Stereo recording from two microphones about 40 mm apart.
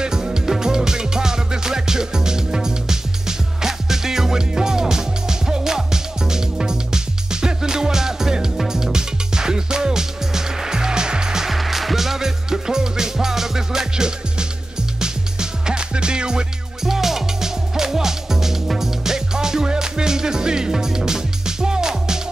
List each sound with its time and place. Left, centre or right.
0.0 s music: centre
11.5 s music: centre